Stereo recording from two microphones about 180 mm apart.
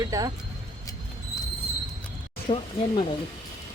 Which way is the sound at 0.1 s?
20° right (ahead or behind).